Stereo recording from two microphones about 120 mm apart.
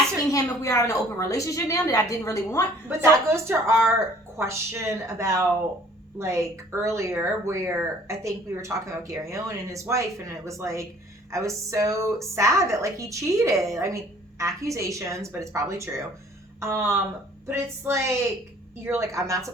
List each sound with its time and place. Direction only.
0.3 s a woman's voice: 25° left (ahead or behind)
3.0 s speech: 20° right (ahead or behind)